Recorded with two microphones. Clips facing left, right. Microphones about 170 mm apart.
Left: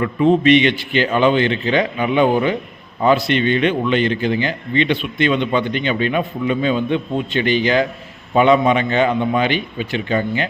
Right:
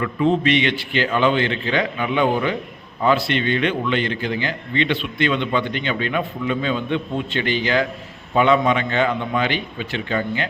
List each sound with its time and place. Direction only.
0.0 s a man's voice: 20° left (ahead or behind)